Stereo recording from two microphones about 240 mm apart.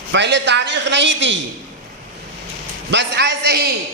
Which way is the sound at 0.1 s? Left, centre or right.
Right.